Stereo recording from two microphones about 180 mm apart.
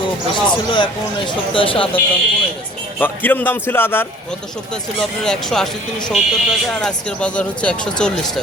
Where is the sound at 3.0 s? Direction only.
10° left (ahead or behind).